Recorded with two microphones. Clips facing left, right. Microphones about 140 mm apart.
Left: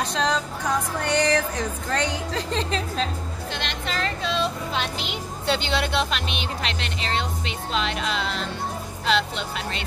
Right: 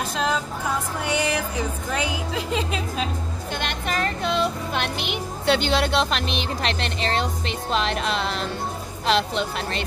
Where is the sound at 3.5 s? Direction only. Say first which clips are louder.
Right 3 dB; 50° right (ahead or behind).